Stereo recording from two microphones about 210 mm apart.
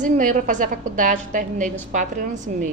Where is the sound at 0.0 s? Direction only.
40° right (ahead or behind).